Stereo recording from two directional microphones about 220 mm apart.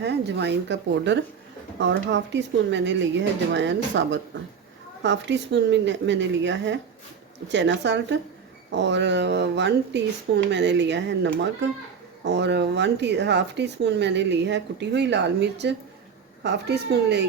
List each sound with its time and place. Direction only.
0.0 s speech: 50° right (ahead or behind)